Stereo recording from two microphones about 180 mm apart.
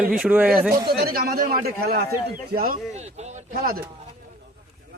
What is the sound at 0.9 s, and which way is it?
A man's voice, 60° right (ahead or behind).